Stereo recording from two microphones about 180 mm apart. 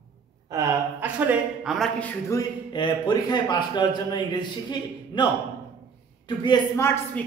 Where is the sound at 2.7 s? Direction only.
25° left (ahead or behind).